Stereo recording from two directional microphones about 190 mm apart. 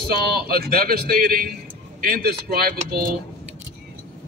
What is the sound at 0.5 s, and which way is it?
A man's voice, 55° right (ahead or behind).